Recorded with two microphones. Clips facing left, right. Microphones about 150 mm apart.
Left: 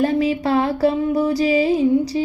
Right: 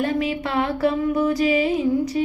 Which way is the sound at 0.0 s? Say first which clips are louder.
Left 5 dB; 35° left (ahead or behind).